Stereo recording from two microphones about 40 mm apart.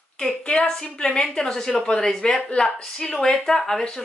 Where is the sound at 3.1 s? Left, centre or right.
Centre.